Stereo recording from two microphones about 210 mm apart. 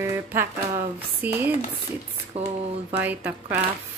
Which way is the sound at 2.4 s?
30° right (ahead or behind).